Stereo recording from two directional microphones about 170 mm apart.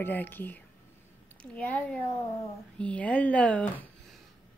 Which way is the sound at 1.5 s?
10° left (ahead or behind).